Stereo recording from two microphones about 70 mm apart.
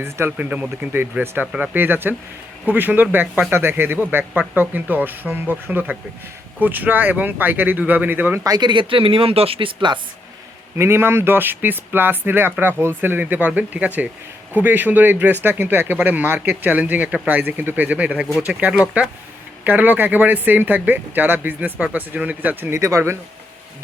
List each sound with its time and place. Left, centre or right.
0.0 s speech: right
0.3 s speech: right
1.2 s speech: right
8.4 s speech: right
10.8 s speech: right; by 19.1 s centre
19.6 s speech: right
22.7 s speech: right